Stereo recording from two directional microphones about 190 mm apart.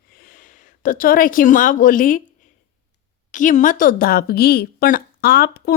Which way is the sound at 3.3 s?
40° left (ahead or behind).